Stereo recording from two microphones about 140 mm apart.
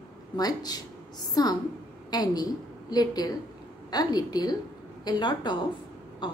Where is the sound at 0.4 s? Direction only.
25° left (ahead or behind).